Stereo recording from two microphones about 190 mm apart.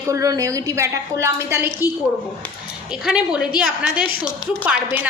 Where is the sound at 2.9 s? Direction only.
5° right (ahead or behind).